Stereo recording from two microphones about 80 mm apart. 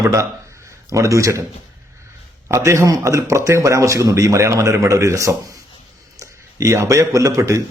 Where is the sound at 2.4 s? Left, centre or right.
Right.